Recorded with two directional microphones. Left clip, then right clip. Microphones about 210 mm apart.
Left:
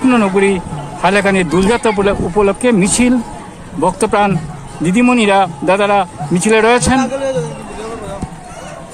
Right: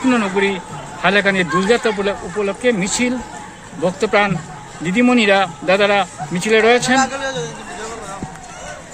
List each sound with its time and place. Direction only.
0.1 s a man's voice: 15° left (ahead or behind)
7.0 s a man's voice: 30° right (ahead or behind)